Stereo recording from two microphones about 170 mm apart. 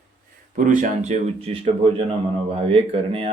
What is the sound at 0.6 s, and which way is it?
Speech, 45° right (ahead or behind).